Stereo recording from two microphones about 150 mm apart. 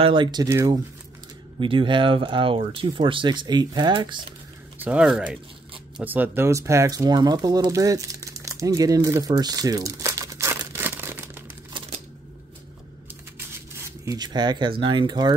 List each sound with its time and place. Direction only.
0.0 s speech: 30° right (ahead or behind)
0.5 s speech: 15° right (ahead or behind)
1.6 s speech: 35° right (ahead or behind)
4.7 s speech: 10° right (ahead or behind)
13.4 s shuffling cards: 20° right (ahead or behind)
14.8 s speech: 30° right (ahead or behind)